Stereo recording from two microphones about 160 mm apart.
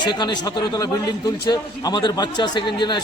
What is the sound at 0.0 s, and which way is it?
A man's voice, 25° left (ahead or behind).